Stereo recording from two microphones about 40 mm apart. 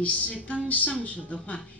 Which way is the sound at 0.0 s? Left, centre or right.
Left.